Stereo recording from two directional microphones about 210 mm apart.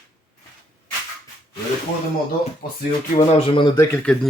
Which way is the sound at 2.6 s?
45° left (ahead or behind).